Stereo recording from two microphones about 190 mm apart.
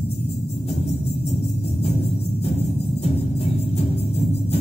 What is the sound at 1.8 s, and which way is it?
Music, 35° left (ahead or behind).